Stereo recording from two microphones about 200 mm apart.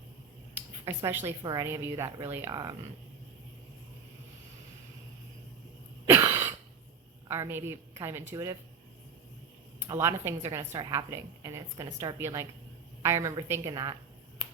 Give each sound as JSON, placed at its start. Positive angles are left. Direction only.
{"t": 0.9, "sound": "a woman's voice", "side_deg": -10}
{"t": 6.1, "sound": "cough", "side_deg": -15}
{"t": 7.3, "sound": "a woman's voice", "side_deg": -10}
{"t": 9.8, "sound": "a woman's voice", "side_deg": -15}